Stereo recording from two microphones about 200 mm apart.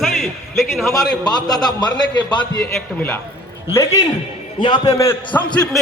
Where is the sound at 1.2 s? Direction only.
20° left (ahead or behind).